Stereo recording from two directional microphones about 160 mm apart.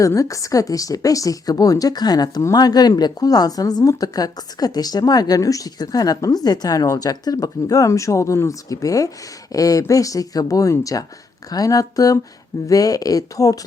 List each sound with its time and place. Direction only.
0.0 s a woman's voice: 20° left (ahead or behind)